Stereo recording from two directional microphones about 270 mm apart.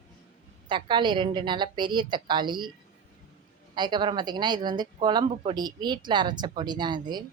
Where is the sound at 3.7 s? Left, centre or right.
Centre.